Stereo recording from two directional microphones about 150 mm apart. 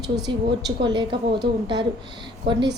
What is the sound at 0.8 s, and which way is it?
A woman's voice, 30° right (ahead or behind).